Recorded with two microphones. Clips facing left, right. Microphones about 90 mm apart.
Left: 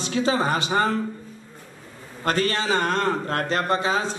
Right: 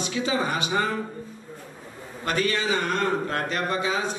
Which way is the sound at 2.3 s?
35° left (ahead or behind).